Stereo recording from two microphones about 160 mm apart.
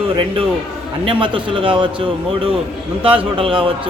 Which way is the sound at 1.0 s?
30° right (ahead or behind).